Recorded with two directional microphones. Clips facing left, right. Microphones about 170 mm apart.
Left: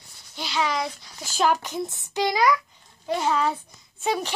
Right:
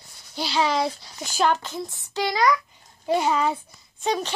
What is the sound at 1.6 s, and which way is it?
Speech, 20° left (ahead or behind).